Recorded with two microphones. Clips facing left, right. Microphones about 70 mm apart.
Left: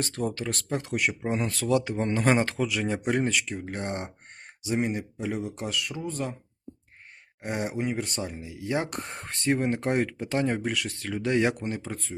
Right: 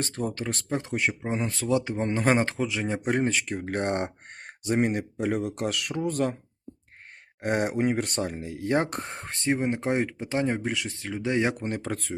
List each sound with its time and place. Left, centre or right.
0.0 s speech: right
3.5 s speech: right
7.4 s speech: right
11.8 s speech: right